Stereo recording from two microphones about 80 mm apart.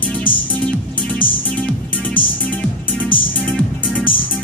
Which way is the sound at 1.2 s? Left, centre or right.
Left.